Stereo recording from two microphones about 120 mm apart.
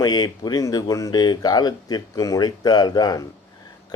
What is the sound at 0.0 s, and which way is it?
Speech, 35° left (ahead or behind).